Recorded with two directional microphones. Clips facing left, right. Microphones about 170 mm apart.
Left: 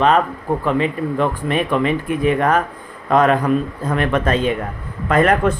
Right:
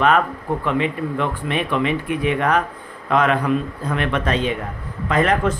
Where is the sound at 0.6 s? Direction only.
40° left (ahead or behind).